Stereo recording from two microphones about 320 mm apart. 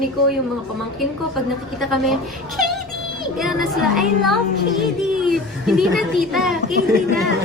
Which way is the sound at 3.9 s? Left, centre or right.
Centre.